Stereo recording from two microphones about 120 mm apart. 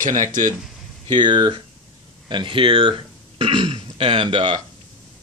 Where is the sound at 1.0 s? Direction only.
40° right (ahead or behind).